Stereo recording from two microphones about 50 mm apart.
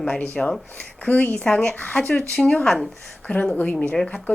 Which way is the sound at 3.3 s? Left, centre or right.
Left.